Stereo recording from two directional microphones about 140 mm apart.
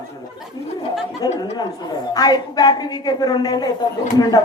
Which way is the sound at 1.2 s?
25° left (ahead or behind).